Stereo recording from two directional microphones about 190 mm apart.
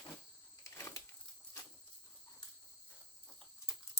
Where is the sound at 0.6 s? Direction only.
15° left (ahead or behind).